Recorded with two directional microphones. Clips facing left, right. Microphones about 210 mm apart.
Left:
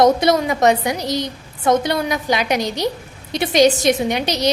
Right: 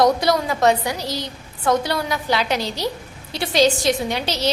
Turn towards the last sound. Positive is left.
turn(degrees=15)  # may be behind; listen again after turning